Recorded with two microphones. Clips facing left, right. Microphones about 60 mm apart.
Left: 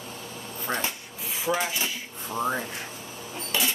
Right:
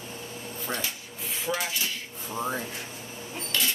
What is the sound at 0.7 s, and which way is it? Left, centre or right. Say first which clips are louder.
Speech: left 4 dB; left.